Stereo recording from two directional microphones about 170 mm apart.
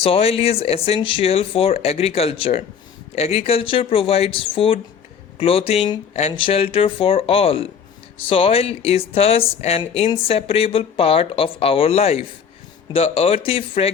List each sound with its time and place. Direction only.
0.0 s speech: 35° left (ahead or behind)